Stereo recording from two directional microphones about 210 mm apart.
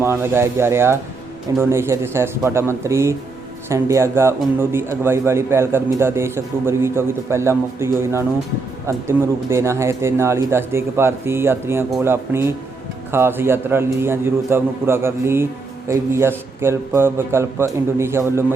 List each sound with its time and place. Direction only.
0.0 s a man's voice: 10° right (ahead or behind)